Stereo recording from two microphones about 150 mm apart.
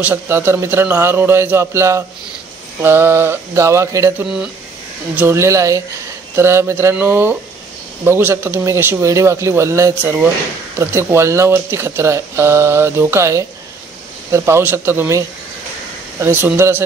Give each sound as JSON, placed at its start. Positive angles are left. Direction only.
{"t": 0.0, "sound": "speech", "side_deg": -15}